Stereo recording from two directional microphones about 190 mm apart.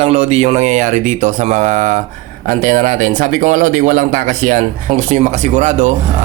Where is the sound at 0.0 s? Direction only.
35° right (ahead or behind).